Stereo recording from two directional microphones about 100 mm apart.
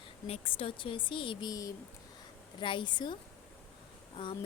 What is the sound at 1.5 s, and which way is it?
Speech, 35° left (ahead or behind).